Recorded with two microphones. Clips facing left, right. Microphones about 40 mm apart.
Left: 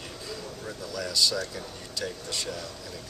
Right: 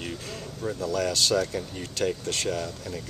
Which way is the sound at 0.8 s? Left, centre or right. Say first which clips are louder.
Right 2 dB; right.